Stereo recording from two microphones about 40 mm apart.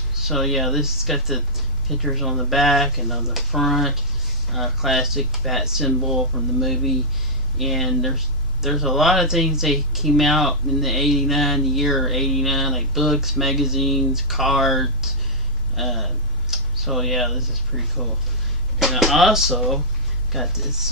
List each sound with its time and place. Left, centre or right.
0.1 s speech: centre